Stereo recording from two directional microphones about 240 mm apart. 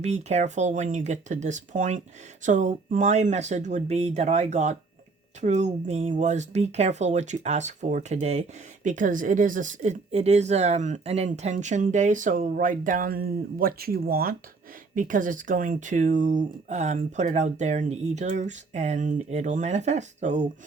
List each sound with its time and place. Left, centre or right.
0.0 s speech: right